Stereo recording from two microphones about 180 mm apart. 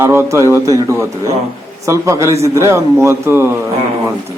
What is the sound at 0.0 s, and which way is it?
A man's voice, 15° right (ahead or behind).